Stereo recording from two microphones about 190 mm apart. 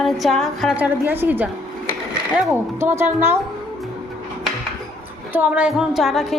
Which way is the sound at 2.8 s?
15° right (ahead or behind).